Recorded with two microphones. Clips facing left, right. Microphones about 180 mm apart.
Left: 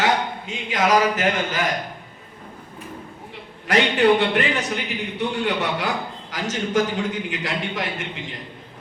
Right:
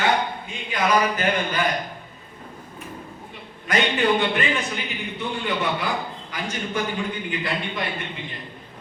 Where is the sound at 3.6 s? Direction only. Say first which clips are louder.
Left 4 dB; 70° left (ahead or behind); by 7.9 s 90° left.